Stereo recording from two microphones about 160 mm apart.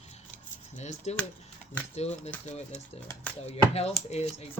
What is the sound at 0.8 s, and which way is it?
Speech, 45° left (ahead or behind).